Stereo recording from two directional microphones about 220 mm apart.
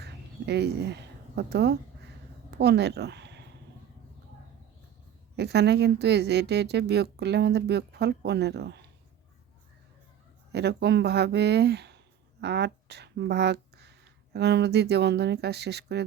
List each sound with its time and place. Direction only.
0.0 s a sound: 50° right (ahead or behind)
2.5 s speech: 50° right (ahead or behind)
5.4 s a woman's voice: 50° right (ahead or behind)
10.5 s a woman's voice: 50° right (ahead or behind)